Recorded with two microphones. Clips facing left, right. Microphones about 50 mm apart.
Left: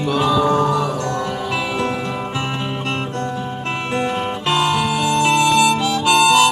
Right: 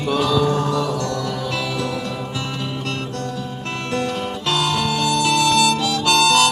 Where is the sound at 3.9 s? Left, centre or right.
Left.